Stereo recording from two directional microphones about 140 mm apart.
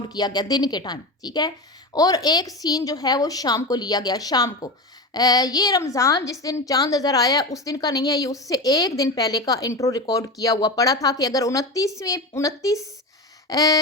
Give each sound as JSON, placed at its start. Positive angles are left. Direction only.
{"t": 0.1, "sound": "a woman's voice", "side_deg": 30}